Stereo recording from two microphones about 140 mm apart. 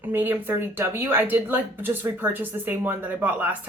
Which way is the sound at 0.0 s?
15° right (ahead or behind).